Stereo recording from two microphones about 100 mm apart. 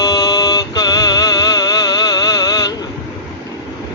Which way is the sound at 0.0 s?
40° left (ahead or behind).